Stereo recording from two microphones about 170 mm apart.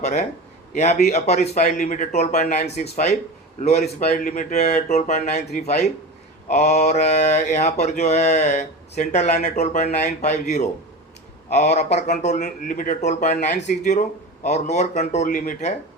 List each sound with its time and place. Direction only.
0.0 s a man's voice: 40° left (ahead or behind)
0.7 s mantra: 40° left (ahead or behind)
4.1 s a man's voice: 50° left (ahead or behind)
6.5 s mantra: 40° left (ahead or behind)
10.0 s a man's voice: 45° left (ahead or behind)